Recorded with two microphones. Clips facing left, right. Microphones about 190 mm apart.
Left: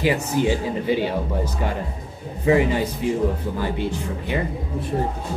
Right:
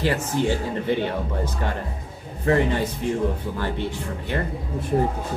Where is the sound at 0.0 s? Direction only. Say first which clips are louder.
Left 2 dB; 10° left (ahead or behind).